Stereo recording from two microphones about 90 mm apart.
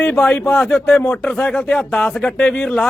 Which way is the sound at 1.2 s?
5° left (ahead or behind).